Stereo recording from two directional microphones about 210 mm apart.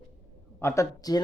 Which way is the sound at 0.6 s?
15° left (ahead or behind).